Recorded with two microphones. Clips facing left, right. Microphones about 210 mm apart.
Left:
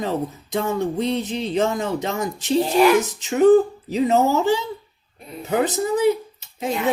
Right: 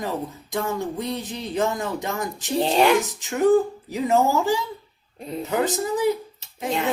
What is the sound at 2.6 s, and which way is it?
Speech, 30° right (ahead or behind).